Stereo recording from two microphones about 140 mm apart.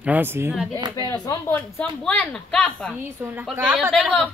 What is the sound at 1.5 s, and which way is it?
A woman's voice, 10° left (ahead or behind).